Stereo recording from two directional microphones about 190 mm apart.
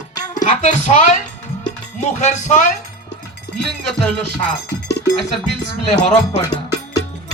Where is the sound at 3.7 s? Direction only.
5° left (ahead or behind).